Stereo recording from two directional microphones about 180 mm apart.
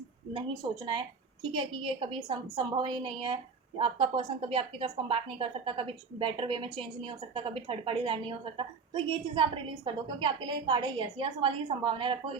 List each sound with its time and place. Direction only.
1.5 s a woman's voice: 30° right (ahead or behind)